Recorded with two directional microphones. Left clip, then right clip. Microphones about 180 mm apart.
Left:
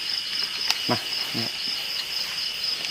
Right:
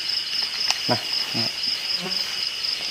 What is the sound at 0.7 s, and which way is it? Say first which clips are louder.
Cricket: right 1 dB; 10° right (ahead or behind).